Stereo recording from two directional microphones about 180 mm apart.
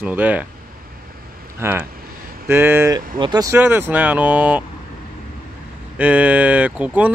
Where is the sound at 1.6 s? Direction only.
15° right (ahead or behind).